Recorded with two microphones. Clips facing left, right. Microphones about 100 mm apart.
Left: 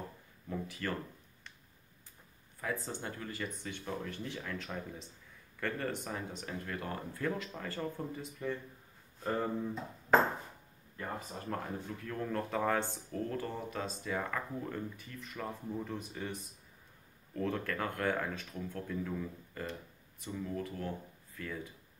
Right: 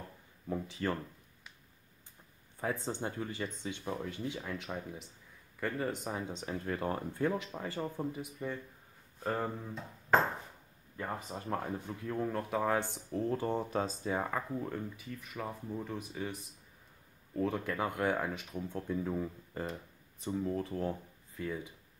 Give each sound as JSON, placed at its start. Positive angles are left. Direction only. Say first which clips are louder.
{"t": 0.5, "sound": "speech", "louder": "right 3 dB", "side_deg": -25}
{"t": 2.6, "sound": "speech", "louder": "right 3 dB", "side_deg": -25}
{"t": 6.0, "sound": "speech", "louder": "right 3 dB", "side_deg": -20}
{"t": 11.0, "sound": "speech", "louder": "right 2 dB", "side_deg": -20}
{"t": 12.9, "sound": "speech", "louder": "right 3 dB", "side_deg": -20}
{"t": 14.6, "sound": "speech", "louder": "right 1 dB", "side_deg": -5}
{"t": 17.4, "sound": "speech", "louder": "right 2 dB", "side_deg": -10}
{"t": 19.7, "sound": "speech", "louder": "right 1 dB", "side_deg": -35}
{"t": 21.4, "sound": "speech", "louder": "right 4 dB", "side_deg": -15}